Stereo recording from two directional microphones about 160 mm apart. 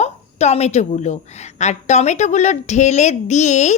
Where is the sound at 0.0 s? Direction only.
45° left (ahead or behind).